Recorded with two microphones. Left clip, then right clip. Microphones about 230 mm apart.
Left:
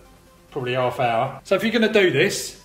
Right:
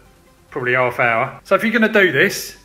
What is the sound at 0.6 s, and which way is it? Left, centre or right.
Speech, right.